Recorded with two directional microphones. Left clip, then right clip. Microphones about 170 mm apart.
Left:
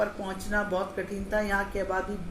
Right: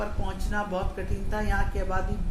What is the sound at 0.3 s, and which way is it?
Speech, 30° left (ahead or behind).